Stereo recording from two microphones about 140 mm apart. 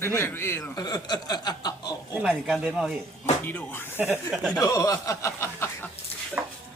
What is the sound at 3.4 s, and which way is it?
Speech, 15° left (ahead or behind).